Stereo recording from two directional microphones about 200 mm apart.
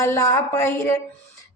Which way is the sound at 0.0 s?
15° left (ahead or behind).